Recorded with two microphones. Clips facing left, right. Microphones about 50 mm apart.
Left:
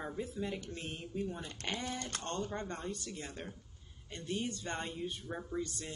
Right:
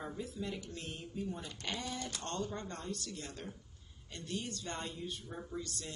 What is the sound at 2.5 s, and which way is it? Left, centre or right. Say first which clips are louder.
A woman's voice: left 2 dB; left.